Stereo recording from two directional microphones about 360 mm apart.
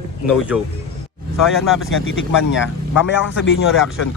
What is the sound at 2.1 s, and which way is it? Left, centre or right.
A man's voice, left.